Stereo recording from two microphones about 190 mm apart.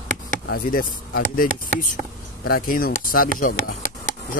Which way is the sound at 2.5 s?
50° left (ahead or behind).